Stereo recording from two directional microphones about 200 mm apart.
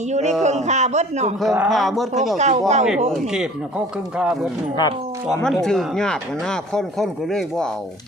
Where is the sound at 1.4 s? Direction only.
Centre (ahead or behind).